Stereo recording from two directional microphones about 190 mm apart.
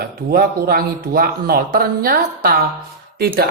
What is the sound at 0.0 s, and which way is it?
Speech, 50° right (ahead or behind).